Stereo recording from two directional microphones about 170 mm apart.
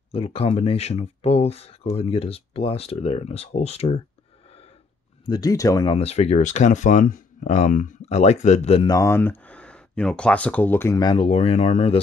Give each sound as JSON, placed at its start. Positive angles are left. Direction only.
{"t": 0.1, "sound": "speech", "side_deg": 35}
{"t": 5.2, "sound": "speech", "side_deg": 25}
{"t": 5.9, "sound": "speech", "side_deg": 40}
{"t": 8.8, "sound": "speech", "side_deg": 20}